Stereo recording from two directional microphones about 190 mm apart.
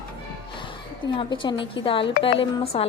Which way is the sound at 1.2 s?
25° left (ahead or behind).